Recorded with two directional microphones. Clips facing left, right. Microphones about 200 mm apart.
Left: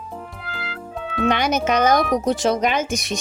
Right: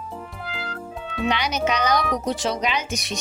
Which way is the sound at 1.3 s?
50° left (ahead or behind).